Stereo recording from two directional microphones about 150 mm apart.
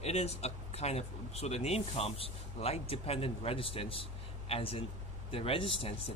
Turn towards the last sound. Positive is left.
turn(degrees=35)  # may be behind; listen again after turning